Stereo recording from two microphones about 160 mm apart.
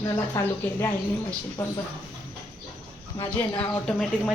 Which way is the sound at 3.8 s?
5° left (ahead or behind).